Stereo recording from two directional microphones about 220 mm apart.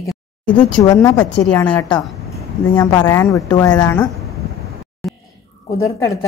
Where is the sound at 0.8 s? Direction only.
15° left (ahead or behind).